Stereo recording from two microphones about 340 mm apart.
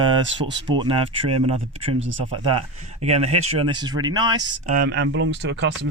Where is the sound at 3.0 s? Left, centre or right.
Centre.